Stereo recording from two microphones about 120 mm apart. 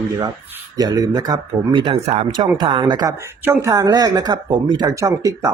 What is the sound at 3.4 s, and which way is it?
Speech, 20° right (ahead or behind).